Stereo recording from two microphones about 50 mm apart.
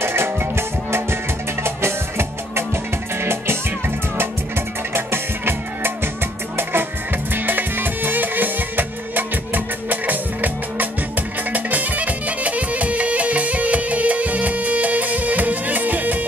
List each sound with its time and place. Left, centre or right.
0.0 s music: right